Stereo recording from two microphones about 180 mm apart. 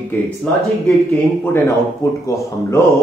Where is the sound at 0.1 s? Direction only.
10° left (ahead or behind).